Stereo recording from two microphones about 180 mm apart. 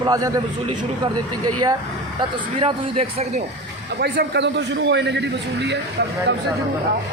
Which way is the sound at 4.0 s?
55° right (ahead or behind).